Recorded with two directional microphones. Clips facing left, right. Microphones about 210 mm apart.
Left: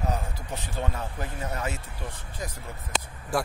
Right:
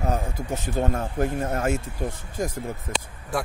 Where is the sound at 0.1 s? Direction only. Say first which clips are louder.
Right 5 dB; 45° right (ahead or behind).